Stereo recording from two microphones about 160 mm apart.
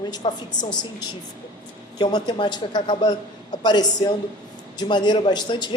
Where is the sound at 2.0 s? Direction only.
25° left (ahead or behind).